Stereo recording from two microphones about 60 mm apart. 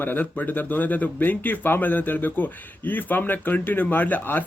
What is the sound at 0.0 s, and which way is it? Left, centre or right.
Speech, left.